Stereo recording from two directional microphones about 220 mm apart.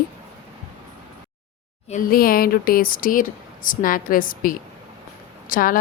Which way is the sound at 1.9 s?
40° left (ahead or behind).